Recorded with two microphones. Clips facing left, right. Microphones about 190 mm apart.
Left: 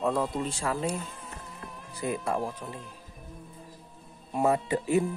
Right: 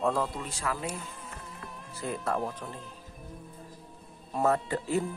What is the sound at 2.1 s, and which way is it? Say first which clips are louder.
Speech: right 3 dB; centre (ahead or behind).